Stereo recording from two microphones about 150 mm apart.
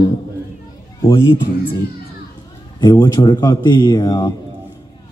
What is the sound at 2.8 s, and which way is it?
Speech, 25° left (ahead or behind).